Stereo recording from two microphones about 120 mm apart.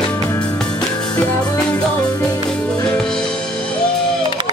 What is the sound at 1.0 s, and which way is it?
Music, 5° left (ahead or behind).